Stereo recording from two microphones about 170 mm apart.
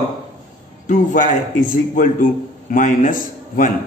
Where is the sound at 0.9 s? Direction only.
50° left (ahead or behind).